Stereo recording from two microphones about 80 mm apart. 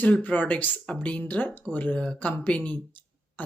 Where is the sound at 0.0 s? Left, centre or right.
Centre.